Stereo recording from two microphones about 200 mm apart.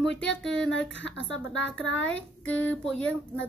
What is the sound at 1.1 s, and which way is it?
Speech, 70° left (ahead or behind).